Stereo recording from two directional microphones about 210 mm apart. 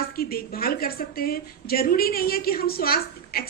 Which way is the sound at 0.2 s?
45° left (ahead or behind).